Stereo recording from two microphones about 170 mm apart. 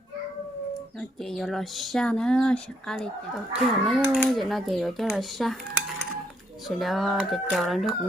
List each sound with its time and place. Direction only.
1.2 s speech: centre (ahead or behind)
6.7 s speech: centre (ahead or behind)